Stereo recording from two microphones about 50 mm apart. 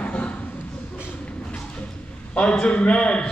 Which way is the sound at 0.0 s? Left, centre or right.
Left.